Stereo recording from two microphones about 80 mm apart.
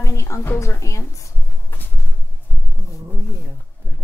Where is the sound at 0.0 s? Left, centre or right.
Left.